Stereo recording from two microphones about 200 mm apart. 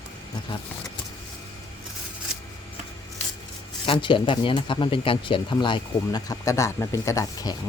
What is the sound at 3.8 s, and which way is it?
Speech, 25° left (ahead or behind).